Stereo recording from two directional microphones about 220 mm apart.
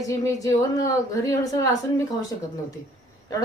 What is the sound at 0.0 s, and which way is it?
Speech, 15° left (ahead or behind).